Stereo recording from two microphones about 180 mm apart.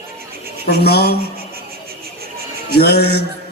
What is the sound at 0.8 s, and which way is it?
Speech, 60° left (ahead or behind).